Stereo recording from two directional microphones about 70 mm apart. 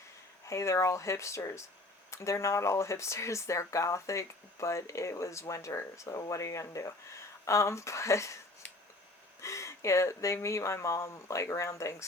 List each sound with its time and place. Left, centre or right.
0.4 s speech: left
9.4 s speech: left